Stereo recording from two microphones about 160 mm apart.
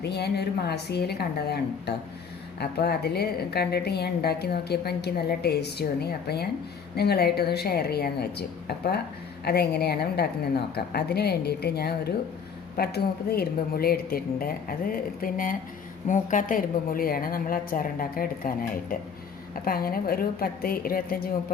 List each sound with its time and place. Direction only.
0.0 s a woman's voice: 90° left; by 21.2 s 65° left (ahead or behind)